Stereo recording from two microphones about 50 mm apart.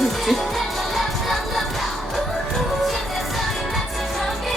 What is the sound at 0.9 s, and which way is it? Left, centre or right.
Music, centre.